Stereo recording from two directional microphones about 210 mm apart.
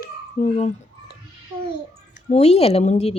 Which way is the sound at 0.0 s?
35° left (ahead or behind).